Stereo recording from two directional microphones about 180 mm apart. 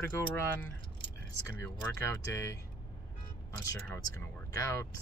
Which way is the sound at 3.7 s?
15° left (ahead or behind).